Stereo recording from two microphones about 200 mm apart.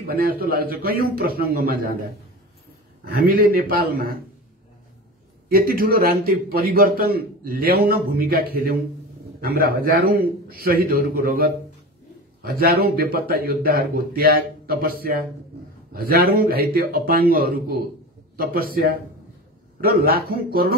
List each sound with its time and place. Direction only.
0.0 s a man's voice: 50° right (ahead or behind)
3.3 s a man's voice: 45° right (ahead or behind)
5.5 s a man's voice: 45° right (ahead or behind)